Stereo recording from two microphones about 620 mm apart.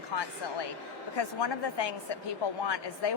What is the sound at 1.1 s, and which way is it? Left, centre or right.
A woman's voice, left.